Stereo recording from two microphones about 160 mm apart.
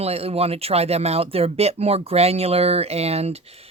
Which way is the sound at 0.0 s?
40° right (ahead or behind).